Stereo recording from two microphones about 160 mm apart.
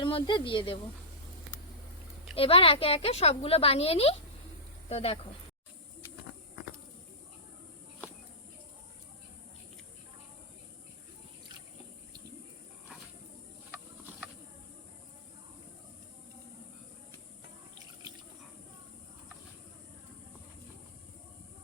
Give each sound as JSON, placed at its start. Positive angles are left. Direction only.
{"t": 0.0, "sound": "speech", "side_deg": 30}
{"t": 2.3, "sound": "speech", "side_deg": 35}
{"t": 13.7, "sound": "a sound", "side_deg": -10}